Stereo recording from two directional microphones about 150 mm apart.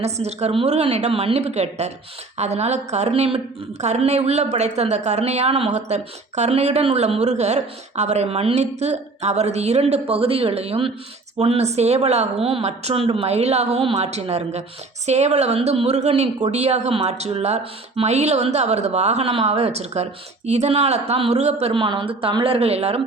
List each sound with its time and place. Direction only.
0.0 s a woman's voice: 45° right (ahead or behind)